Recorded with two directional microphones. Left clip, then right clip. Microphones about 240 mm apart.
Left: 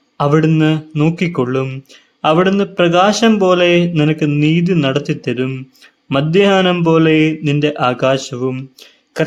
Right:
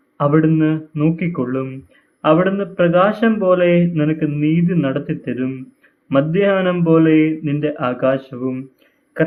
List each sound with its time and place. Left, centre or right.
0.2 s a man's voice: left